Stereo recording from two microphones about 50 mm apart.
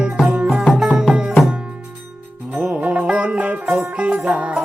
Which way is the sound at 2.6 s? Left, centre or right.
Right.